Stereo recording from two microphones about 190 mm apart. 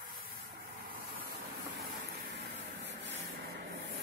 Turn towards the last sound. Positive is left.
turn(degrees=-65)  # may be behind; listen again after turning